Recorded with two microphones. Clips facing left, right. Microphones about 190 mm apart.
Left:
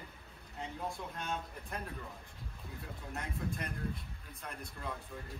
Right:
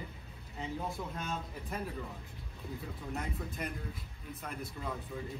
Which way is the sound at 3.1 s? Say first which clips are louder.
Even; centre (ahead or behind).